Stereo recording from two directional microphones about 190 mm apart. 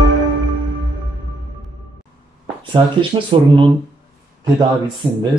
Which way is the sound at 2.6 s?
25° right (ahead or behind).